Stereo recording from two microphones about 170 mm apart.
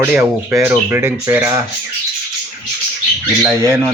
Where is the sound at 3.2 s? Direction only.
15° right (ahead or behind).